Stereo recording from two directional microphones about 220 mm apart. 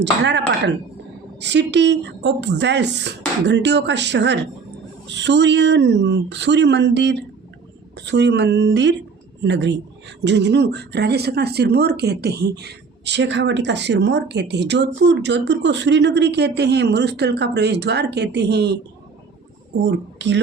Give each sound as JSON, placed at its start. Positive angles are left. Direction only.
{"t": 0.0, "sound": "speech", "side_deg": -50}
{"t": 19.8, "sound": "speech", "side_deg": -55}